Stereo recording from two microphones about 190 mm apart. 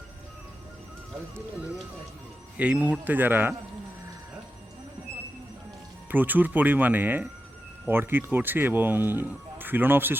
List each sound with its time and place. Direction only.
2.6 s speech: 5° right (ahead or behind)
6.1 s speech: 10° right (ahead or behind)